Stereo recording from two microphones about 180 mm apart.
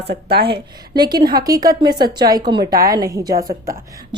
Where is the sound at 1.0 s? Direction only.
25° right (ahead or behind).